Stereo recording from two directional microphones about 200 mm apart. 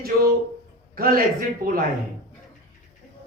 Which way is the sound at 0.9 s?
45° right (ahead or behind).